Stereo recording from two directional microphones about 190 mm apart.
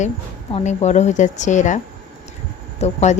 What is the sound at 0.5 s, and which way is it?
Speech, 35° left (ahead or behind).